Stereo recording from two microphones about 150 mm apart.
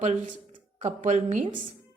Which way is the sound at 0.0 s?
50° right (ahead or behind).